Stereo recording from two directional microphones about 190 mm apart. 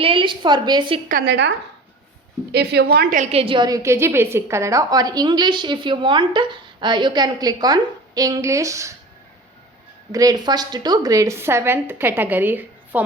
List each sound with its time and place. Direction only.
0.0 s a woman's voice: 25° right (ahead or behind)
1.0 s a woman's voice: 55° right (ahead or behind)
3.3 s a woman's voice: 25° right (ahead or behind)
10.1 s a woman's voice: 20° right (ahead or behind)